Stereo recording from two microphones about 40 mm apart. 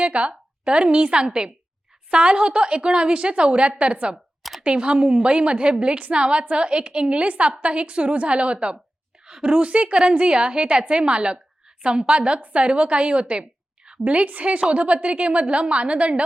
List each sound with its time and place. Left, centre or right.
0.0 s a woman's voice: right